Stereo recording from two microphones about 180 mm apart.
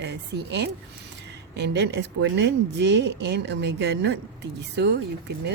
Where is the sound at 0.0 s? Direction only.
70° right (ahead or behind).